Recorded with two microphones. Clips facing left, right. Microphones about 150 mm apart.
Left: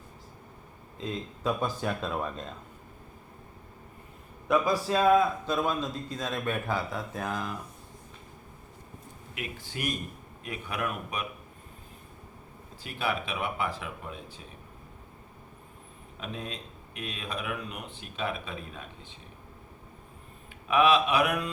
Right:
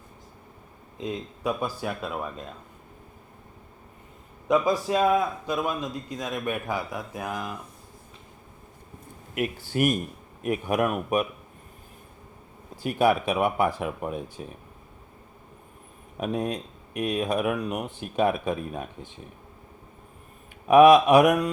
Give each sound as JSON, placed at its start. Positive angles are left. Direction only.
{"t": 0.9, "sound": "a man's voice", "side_deg": -20}
{"t": 4.4, "sound": "a man's voice", "side_deg": -20}
{"t": 9.7, "sound": "speech", "side_deg": -50}
{"t": 12.8, "sound": "speech", "side_deg": -45}
{"t": 16.2, "sound": "speech", "side_deg": -45}
{"t": 20.7, "sound": "speech", "side_deg": -45}